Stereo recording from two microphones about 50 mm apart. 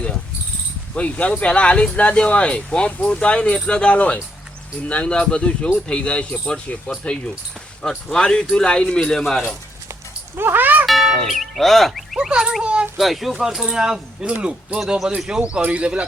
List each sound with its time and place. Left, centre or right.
0.9 s speech: left
7.8 s speech: centre
10.3 s a sound: right
10.8 s music: centre
11.3 s speech: centre
12.3 s speech: centre
13.0 s speech: centre
14.3 s speech: right